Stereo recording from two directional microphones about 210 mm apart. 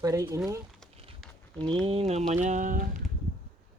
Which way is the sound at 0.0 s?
15° right (ahead or behind).